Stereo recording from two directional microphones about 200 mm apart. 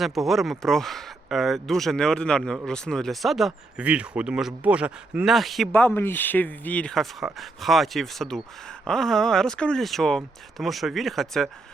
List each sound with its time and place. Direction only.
0.0 s speech: centre (ahead or behind)